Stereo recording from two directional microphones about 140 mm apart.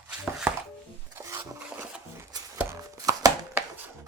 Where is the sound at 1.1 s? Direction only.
20° right (ahead or behind).